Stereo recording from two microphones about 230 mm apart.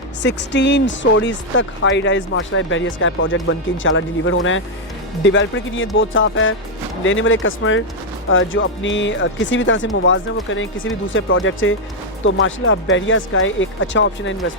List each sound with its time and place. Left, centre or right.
0.2 s speech: left